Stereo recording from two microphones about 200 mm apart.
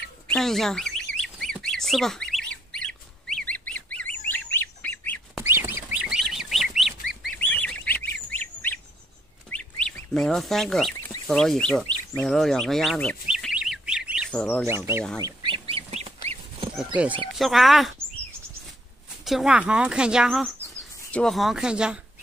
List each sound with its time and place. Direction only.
0.3 s speech: centre (ahead or behind)
1.1 s bird: 5° left (ahead or behind)
5.4 s fowl: 10° right (ahead or behind); by 8.7 s 10° left (ahead or behind)
9.5 s bird: 5° left (ahead or behind)
11.2 s speech: centre (ahead or behind)
13.3 s chirp: 5° right (ahead or behind)
14.3 s speech: 5° left (ahead or behind)
15.2 s goose: 25° right (ahead or behind)
16.7 s speech: 5° right (ahead or behind)
19.2 s speech: centre (ahead or behind)